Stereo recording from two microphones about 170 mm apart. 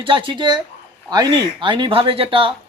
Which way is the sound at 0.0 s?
30° right (ahead or behind).